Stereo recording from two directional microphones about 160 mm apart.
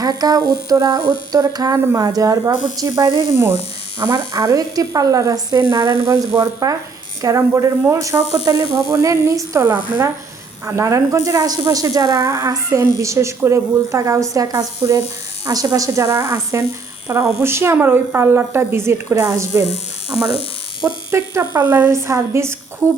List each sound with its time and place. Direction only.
0.0 s a woman's voice: 25° right (ahead or behind)